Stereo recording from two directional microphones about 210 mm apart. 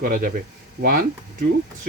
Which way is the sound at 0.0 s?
45° right (ahead or behind).